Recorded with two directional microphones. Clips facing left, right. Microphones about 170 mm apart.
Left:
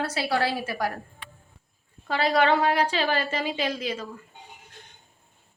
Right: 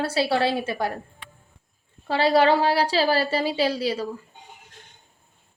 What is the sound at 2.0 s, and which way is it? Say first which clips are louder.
A woman's voice: right 4 dB; 30° right (ahead or behind).